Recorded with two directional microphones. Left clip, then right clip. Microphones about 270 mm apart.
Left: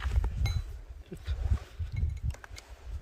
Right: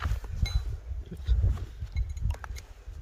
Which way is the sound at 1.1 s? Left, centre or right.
Centre.